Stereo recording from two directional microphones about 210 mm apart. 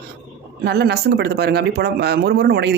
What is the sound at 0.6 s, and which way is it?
Speech, 50° right (ahead or behind).